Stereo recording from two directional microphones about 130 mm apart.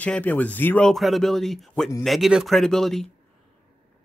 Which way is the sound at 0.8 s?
Centre (ahead or behind).